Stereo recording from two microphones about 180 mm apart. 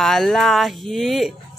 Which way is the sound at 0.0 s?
Centre (ahead or behind).